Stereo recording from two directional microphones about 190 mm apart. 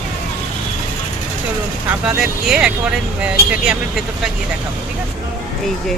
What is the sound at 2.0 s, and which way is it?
Speech, centre (ahead or behind).